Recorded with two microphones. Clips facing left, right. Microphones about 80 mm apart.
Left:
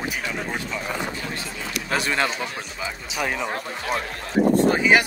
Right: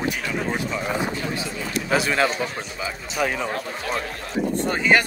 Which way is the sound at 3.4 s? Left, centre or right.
Centre.